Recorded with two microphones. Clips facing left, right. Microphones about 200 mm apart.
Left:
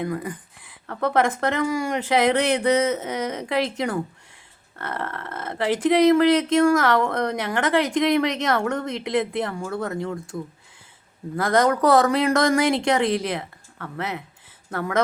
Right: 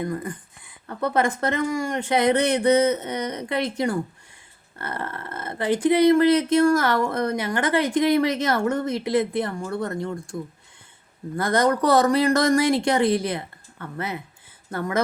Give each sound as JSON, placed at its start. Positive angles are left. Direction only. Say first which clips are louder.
{"t": 0.0, "sound": "speech", "louder": "left 1 dB", "side_deg": 5}
{"t": 11.3, "sound": "speech", "louder": "left 1 dB", "side_deg": 0}